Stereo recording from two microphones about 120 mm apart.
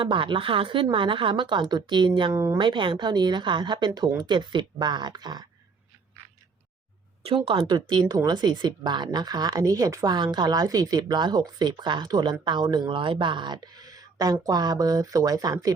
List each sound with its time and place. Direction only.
0.0 s a woman's voice: 45° right (ahead or behind)
2.3 s a woman's voice: 25° right (ahead or behind)
2.6 s speech: 40° right (ahead or behind)
7.3 s a woman's voice: 50° right (ahead or behind)
7.7 s speech: 35° right (ahead or behind)